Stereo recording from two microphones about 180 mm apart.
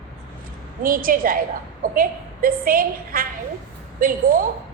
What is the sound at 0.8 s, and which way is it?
A woman's voice, 50° right (ahead or behind).